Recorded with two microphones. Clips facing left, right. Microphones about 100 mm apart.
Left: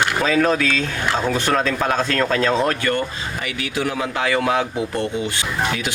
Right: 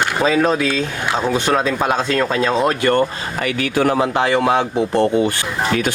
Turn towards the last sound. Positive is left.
turn(degrees=-30)  # may be behind; listen again after turning